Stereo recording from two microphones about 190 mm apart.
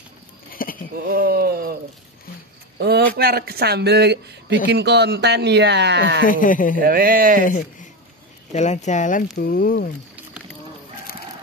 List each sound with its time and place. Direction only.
0.5 s a sound: 50° left (ahead or behind)
1.0 s a sound: 55° right (ahead or behind)
3.2 s speech: 55° right (ahead or behind)
6.2 s speech: 45° left (ahead or behind)
6.8 s speech: 50° right (ahead or behind)
7.4 s a man's voice: 45° left (ahead or behind)